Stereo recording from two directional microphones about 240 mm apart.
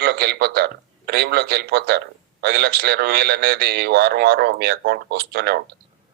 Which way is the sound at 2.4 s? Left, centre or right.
Right.